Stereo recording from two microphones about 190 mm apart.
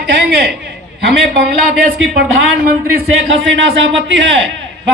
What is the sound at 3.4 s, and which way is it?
A man's voice, 75° right (ahead or behind).